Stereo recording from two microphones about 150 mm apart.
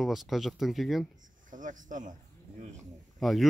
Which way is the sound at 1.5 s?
60° right (ahead or behind).